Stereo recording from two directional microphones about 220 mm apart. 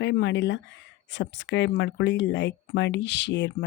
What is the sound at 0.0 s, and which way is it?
Speech, 55° left (ahead or behind).